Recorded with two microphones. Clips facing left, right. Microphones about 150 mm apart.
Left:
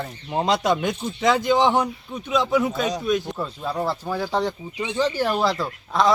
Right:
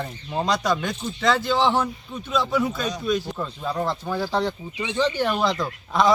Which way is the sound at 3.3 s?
5° left (ahead or behind).